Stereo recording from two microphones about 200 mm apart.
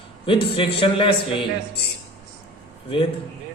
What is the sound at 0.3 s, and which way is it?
Speech, 25° left (ahead or behind).